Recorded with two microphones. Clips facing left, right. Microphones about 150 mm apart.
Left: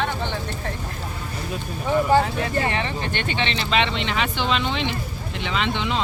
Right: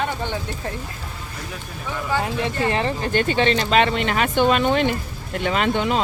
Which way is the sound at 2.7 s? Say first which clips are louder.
Right 5 dB; 40° right (ahead or behind).